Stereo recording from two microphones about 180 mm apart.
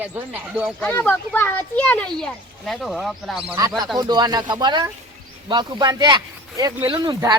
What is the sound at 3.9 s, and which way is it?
Speech, 25° right (ahead or behind).